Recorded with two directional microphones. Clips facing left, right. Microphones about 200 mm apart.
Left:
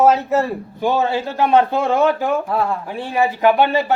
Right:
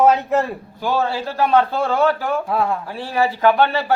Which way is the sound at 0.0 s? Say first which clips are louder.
Left 1 dB; 5° left (ahead or behind).